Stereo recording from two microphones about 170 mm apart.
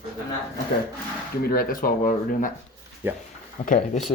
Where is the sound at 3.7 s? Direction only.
50° left (ahead or behind).